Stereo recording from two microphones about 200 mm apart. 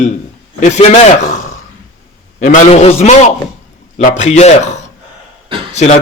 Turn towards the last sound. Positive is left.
turn(degrees=35)  # may be behind; listen again after turning